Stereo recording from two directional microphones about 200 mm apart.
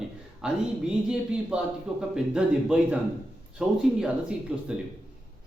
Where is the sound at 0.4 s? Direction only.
5° right (ahead or behind).